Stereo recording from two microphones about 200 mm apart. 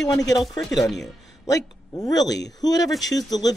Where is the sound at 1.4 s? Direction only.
15° left (ahead or behind).